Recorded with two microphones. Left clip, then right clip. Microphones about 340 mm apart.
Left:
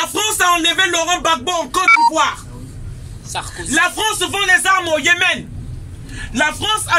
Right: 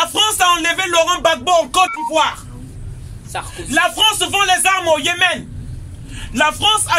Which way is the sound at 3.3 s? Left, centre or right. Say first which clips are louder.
Left 1 dB; right.